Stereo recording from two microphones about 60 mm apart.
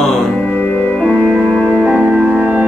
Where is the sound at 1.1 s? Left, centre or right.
Centre.